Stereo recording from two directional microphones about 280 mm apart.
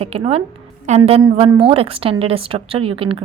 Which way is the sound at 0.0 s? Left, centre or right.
Right.